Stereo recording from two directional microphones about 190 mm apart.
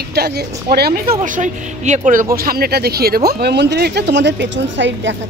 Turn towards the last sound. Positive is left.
turn(degrees=-70)  # may be behind; listen again after turning